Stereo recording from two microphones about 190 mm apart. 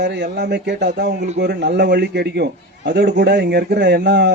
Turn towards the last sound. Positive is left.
turn(degrees=-65)  # may be behind; listen again after turning